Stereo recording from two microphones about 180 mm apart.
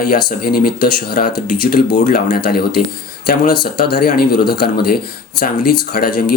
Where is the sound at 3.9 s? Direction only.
60° left (ahead or behind).